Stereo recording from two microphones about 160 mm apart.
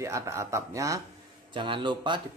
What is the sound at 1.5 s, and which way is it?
Speech, 30° right (ahead or behind).